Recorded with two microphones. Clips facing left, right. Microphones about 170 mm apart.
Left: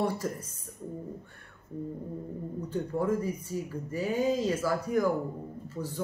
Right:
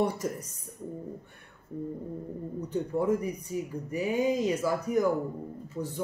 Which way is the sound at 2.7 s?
15° right (ahead or behind).